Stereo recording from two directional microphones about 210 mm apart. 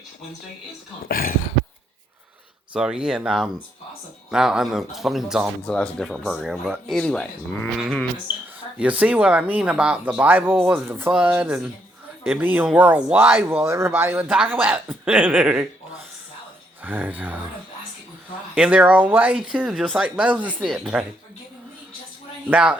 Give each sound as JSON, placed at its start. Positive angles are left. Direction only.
{"t": 1.0, "sound": "a sound", "side_deg": 45}
{"t": 2.7, "sound": "speech", "side_deg": -5}
{"t": 16.8, "sound": "speech", "side_deg": -10}
{"t": 18.5, "sound": "speech", "side_deg": -5}
{"t": 22.4, "sound": "speech", "side_deg": -5}